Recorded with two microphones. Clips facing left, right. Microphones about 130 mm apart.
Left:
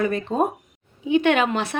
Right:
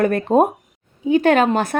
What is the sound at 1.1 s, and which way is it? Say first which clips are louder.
Speech: right 4 dB; 40° right (ahead or behind).